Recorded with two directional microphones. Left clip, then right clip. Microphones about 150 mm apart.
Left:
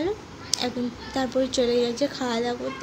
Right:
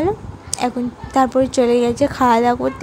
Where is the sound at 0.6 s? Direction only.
50° right (ahead or behind).